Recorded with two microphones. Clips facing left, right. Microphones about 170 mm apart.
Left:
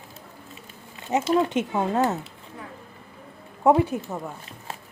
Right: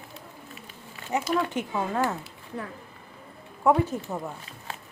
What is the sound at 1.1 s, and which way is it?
A woman's voice, 20° left (ahead or behind).